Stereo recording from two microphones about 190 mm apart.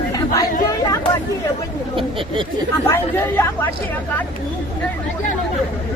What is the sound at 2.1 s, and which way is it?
Speech, 25° right (ahead or behind).